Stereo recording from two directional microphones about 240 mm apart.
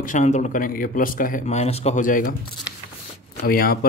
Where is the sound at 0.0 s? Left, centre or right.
Left.